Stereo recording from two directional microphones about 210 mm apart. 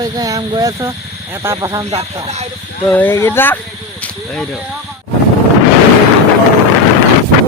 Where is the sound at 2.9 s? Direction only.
10° left (ahead or behind).